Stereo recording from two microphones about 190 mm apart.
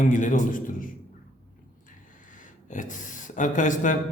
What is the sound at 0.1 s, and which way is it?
Speech, 40° left (ahead or behind).